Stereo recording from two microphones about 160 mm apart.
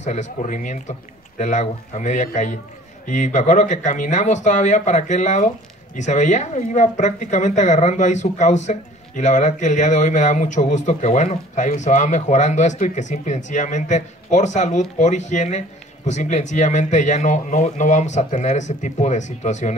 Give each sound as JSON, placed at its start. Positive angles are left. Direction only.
{"t": 0.0, "sound": "speech", "side_deg": 45}